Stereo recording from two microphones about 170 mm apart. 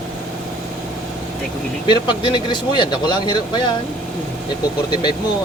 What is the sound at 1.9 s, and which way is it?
Speech, 30° left (ahead or behind).